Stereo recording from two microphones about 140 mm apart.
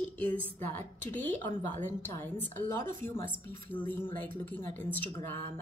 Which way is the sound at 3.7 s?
15° left (ahead or behind).